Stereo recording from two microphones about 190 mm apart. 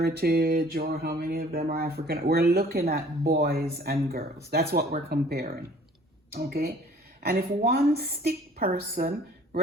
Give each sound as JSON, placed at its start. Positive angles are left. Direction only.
{"t": 0.0, "sound": "speech", "side_deg": -55}